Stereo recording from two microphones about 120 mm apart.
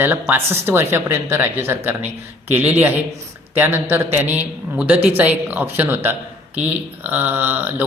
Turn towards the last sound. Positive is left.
turn(degrees=-15)  # may be behind; listen again after turning